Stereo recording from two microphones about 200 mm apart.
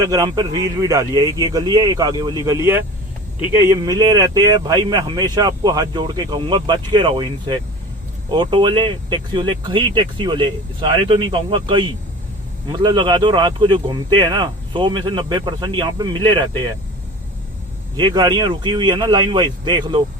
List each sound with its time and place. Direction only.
0.0 s speech: 15° right (ahead or behind)
3.6 s speech: 20° right (ahead or behind)
17.9 s speech: 20° right (ahead or behind)